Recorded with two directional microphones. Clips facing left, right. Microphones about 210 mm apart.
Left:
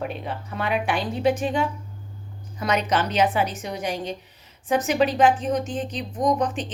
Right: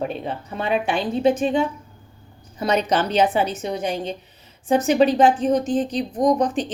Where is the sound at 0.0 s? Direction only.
30° right (ahead or behind).